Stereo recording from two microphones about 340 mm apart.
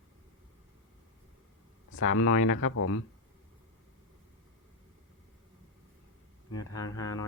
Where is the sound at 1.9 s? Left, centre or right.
Left.